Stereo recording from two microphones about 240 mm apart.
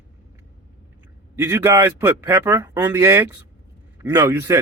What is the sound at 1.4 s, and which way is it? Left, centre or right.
A man's voice, centre.